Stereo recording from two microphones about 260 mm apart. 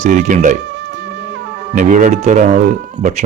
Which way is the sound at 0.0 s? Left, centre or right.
Right.